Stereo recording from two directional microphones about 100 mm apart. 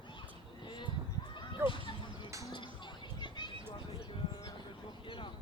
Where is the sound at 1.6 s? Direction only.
25° right (ahead or behind).